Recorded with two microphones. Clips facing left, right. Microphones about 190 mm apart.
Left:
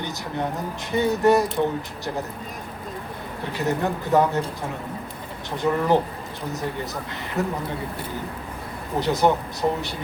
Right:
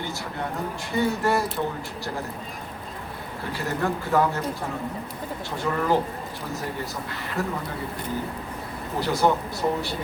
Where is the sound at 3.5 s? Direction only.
20° left (ahead or behind).